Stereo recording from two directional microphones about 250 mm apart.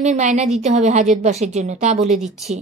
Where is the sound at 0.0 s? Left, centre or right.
Right.